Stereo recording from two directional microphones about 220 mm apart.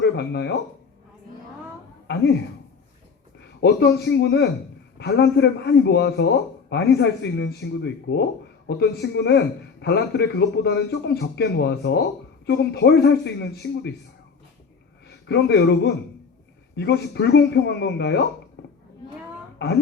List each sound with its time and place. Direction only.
0.0 s speech: 50° left (ahead or behind)
2.0 s a man's voice: 50° left (ahead or behind)
3.6 s a man's voice: 50° left (ahead or behind)
15.0 s a man's voice: 50° left (ahead or behind)
19.6 s a man's voice: 45° left (ahead or behind)